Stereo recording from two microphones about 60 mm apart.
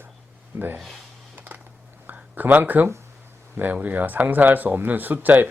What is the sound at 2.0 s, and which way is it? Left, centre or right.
Speech, right.